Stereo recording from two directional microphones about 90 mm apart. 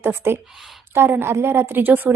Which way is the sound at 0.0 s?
25° right (ahead or behind).